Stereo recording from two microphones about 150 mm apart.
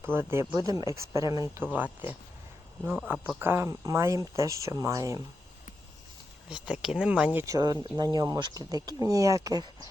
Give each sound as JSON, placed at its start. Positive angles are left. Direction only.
{"t": 0.0, "sound": "speech", "side_deg": -15}
{"t": 1.7, "sound": "speech", "side_deg": -10}
{"t": 6.5, "sound": "speech", "side_deg": -5}
{"t": 7.4, "sound": "speech", "side_deg": -25}